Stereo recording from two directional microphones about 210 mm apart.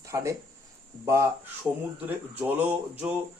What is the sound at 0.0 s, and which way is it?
A man's voice, 15° right (ahead or behind).